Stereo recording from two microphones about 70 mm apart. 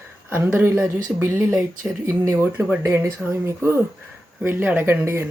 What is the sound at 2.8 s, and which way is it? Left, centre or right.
Speech, right.